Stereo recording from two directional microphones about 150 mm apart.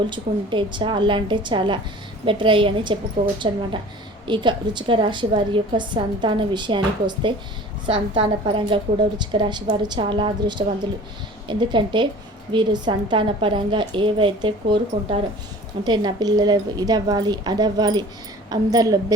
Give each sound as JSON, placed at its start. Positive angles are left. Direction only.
{"t": 0.1, "sound": "a woman's voice", "side_deg": -30}